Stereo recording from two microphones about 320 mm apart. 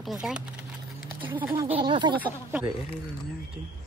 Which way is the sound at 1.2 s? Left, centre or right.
Centre.